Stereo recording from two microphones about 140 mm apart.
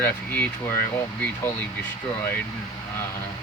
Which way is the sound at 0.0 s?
15° left (ahead or behind).